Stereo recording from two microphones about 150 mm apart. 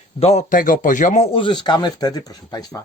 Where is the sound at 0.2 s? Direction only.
45° left (ahead or behind).